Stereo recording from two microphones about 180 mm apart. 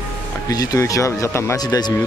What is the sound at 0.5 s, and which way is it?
Speech, 20° left (ahead or behind).